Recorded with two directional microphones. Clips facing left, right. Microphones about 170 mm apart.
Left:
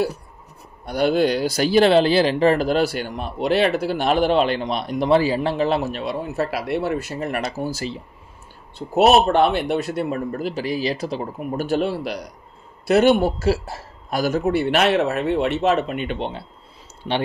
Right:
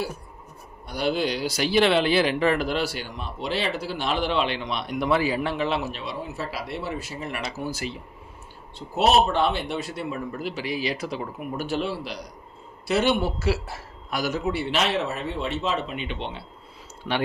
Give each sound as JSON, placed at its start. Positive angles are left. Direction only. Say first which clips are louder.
{"t": 0.8, "sound": "speech", "louder": "left 7 dB", "side_deg": 55}
{"t": 2.8, "sound": "speech", "louder": "left 7 dB", "side_deg": 55}
{"t": 8.9, "sound": "speech", "louder": "left 5 dB", "side_deg": 55}
{"t": 11.5, "sound": "a man's voice", "louder": "left 6 dB", "side_deg": 50}
{"t": 14.4, "sound": "speech", "louder": "left 8 dB", "side_deg": 55}
{"t": 17.0, "sound": "speech", "louder": "left 4 dB", "side_deg": 25}